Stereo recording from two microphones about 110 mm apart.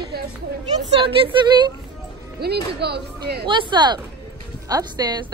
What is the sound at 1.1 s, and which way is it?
Speech, 55° right (ahead or behind).